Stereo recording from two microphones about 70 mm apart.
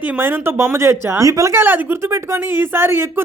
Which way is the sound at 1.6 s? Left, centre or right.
Right.